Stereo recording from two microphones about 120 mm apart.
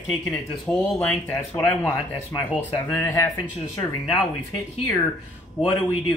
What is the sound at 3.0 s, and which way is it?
Speech, 20° left (ahead or behind).